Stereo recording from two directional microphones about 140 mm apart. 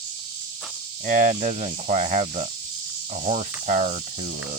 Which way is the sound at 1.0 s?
65° right (ahead or behind).